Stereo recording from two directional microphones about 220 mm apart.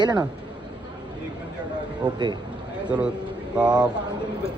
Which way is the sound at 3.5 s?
5° right (ahead or behind).